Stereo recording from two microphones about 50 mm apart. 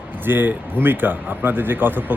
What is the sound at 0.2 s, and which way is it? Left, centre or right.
Speech, right.